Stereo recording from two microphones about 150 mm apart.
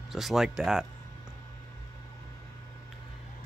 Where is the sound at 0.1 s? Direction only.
Centre (ahead or behind).